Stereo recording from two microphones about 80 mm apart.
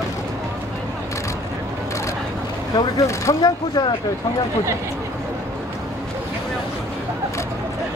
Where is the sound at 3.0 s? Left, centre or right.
Left.